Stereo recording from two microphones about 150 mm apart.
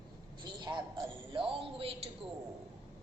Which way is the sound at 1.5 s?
35° right (ahead or behind).